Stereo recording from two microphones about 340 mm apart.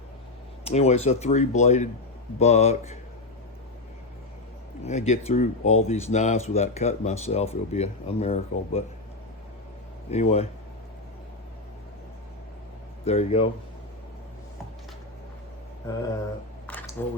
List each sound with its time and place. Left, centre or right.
0.6 s speech: centre
4.8 s speech: centre
10.1 s speech: centre
13.1 s speech: centre
16.6 s a sound: centre